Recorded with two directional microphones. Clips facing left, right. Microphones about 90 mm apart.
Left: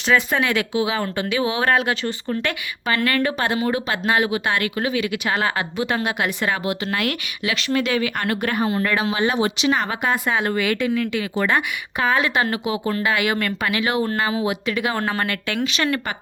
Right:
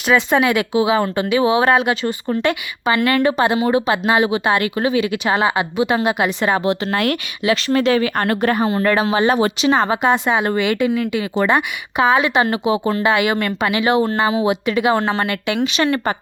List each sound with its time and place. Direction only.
0.1 s a woman's voice: 15° right (ahead or behind)